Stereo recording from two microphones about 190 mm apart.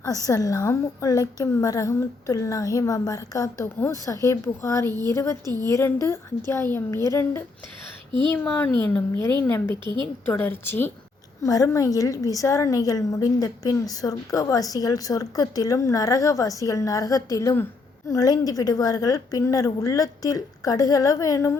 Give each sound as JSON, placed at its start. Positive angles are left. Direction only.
{"t": 0.3, "sound": "a woman's voice", "side_deg": 15}
{"t": 4.9, "sound": "a woman's voice", "side_deg": -20}
{"t": 5.1, "sound": "a woman's voice", "side_deg": 15}